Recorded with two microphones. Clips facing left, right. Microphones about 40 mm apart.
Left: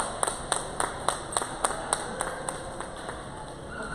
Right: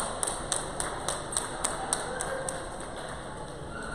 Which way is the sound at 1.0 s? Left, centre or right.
Left.